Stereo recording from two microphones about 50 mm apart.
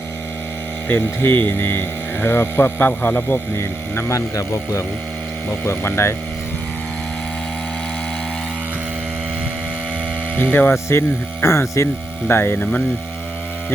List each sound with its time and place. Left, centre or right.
0.9 s speech: left
2.2 s speech: left
3.6 s speech: left
5.6 s speech: left
10.3 s speech: left
10.8 s speech: left
12.3 s speech: left